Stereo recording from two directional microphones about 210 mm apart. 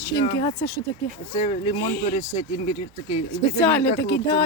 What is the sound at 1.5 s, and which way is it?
Speech, 35° left (ahead or behind).